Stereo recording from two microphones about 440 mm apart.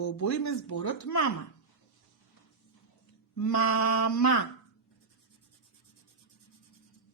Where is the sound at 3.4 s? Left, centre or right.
Left.